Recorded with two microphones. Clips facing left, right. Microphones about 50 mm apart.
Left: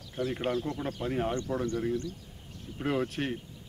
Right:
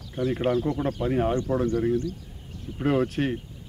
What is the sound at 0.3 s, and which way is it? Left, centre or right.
Speech, centre.